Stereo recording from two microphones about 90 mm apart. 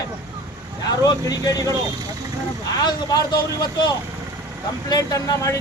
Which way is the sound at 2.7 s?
50° left (ahead or behind).